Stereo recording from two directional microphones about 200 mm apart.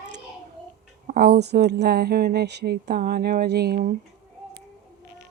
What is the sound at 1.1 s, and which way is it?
Speech, 50° right (ahead or behind).